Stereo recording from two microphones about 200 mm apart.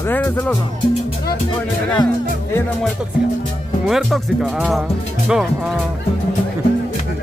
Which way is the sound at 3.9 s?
Centre (ahead or behind).